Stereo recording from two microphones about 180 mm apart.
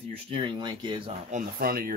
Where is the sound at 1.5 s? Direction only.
55° right (ahead or behind).